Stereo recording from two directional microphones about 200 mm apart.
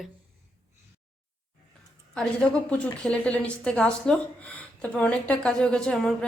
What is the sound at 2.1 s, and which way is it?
A woman's voice, 5° left (ahead or behind).